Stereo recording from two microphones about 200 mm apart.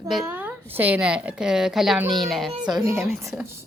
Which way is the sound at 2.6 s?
15° right (ahead or behind).